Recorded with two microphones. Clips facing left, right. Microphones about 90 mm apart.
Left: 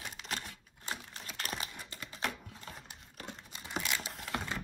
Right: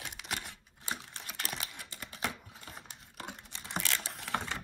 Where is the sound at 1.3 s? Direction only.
40° left (ahead or behind).